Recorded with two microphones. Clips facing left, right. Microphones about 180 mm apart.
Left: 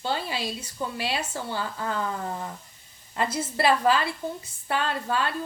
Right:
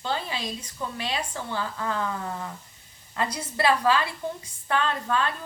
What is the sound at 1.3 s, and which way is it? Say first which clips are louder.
Speech: even; 30° left (ahead or behind).